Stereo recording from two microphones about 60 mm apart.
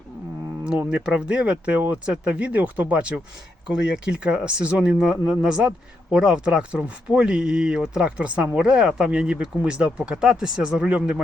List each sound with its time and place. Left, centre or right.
0.9 s speech: centre
3.7 s speech: centre